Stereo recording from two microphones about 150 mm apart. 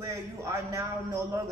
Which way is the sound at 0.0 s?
20° right (ahead or behind).